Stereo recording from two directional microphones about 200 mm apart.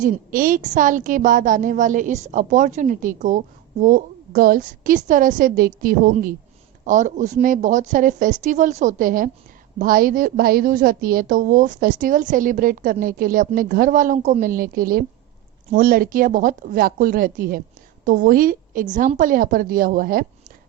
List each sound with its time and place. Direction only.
0.0 s a woman's voice: 40° right (ahead or behind)